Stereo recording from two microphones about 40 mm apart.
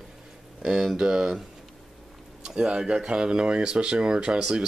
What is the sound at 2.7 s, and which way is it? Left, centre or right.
Speech, right.